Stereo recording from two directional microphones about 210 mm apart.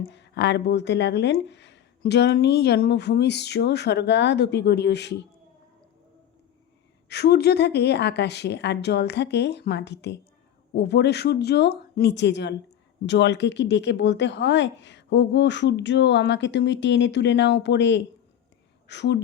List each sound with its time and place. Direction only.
0.0 s speech: 55° left (ahead or behind)
7.1 s speech: 50° left (ahead or behind)